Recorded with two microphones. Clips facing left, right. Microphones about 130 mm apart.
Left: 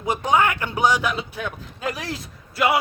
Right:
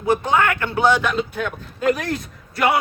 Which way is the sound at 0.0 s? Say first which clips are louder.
Right 2 dB; 15° left (ahead or behind).